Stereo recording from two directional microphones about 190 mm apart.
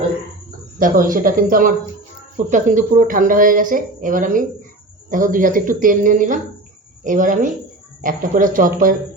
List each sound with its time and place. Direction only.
0.8 s speech: 45° right (ahead or behind)